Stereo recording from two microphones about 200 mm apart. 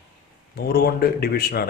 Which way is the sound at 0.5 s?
50° left (ahead or behind).